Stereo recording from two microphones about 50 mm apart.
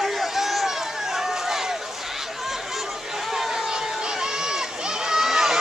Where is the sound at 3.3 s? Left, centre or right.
Centre.